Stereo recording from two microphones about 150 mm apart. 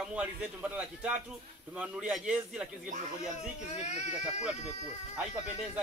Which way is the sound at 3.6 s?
50° left (ahead or behind).